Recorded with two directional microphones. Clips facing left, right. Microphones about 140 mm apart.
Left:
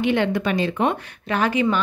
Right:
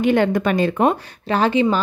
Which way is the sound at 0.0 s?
45° right (ahead or behind).